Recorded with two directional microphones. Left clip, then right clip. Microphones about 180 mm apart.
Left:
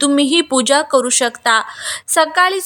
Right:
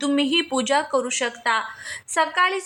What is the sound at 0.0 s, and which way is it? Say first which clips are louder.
A woman's voice: left 7 dB; 30° left (ahead or behind).